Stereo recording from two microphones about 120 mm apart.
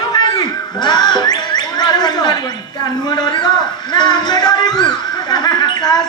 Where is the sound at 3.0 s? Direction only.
35° left (ahead or behind).